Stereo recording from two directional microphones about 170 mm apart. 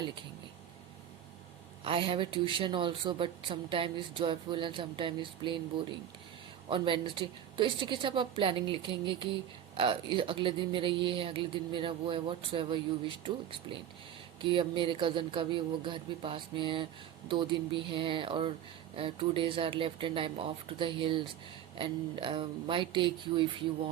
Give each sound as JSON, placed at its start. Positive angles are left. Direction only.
{"t": 1.8, "sound": "speech", "side_deg": -30}